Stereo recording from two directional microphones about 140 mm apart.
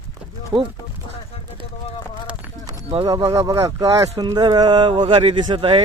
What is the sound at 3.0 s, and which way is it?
A man's voice, 25° right (ahead or behind).